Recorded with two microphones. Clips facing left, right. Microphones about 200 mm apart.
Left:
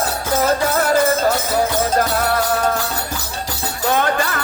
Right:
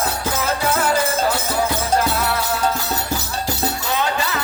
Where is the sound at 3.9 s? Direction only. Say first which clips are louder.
Left 6 dB; 50° left (ahead or behind).